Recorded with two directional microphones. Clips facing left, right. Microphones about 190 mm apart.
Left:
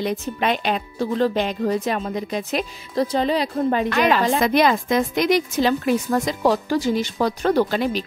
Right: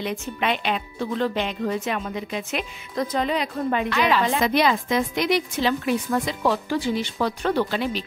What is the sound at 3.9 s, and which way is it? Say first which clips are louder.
Speech: left 3 dB; 50° left (ahead or behind).